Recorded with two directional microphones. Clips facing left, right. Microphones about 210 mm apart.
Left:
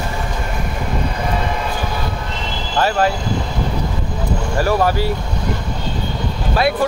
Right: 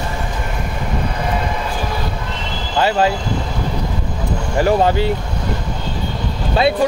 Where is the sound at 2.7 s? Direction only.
20° right (ahead or behind).